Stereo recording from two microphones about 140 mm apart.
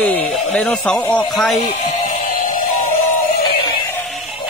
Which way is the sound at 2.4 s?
70° left (ahead or behind).